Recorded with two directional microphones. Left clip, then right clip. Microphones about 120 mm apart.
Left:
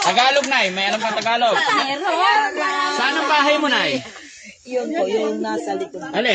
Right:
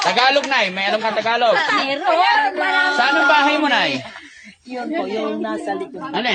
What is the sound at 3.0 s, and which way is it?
Speech, 50° right (ahead or behind).